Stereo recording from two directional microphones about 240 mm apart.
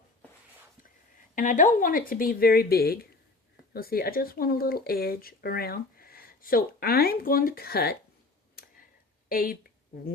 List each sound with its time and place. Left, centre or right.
1.4 s speech: left
9.3 s speech: left